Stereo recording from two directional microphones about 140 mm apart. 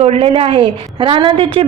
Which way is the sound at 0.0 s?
45° right (ahead or behind).